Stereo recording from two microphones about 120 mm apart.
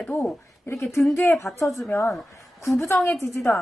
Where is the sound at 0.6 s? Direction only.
20° left (ahead or behind).